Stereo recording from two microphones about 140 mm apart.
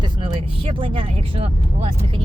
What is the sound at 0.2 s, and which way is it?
Speech, 40° right (ahead or behind).